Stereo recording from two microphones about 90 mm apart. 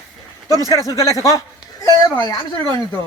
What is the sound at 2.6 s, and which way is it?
Speech, 55° right (ahead or behind).